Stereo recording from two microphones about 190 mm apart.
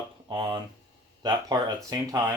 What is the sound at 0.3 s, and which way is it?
Speech, 25° right (ahead or behind).